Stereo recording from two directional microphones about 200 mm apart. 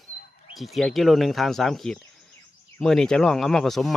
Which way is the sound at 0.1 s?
45° left (ahead or behind).